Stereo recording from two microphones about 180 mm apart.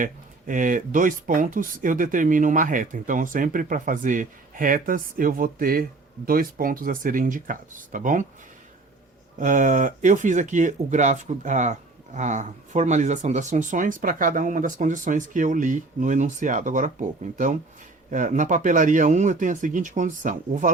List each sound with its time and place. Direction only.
0.0 s speech: 45° right (ahead or behind)
9.4 s speech: 45° right (ahead or behind)